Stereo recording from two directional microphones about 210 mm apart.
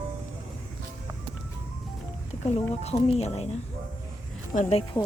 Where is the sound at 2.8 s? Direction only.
30° left (ahead or behind).